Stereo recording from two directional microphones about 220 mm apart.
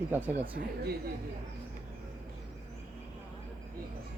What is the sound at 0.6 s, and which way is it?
Speech, 40° right (ahead or behind).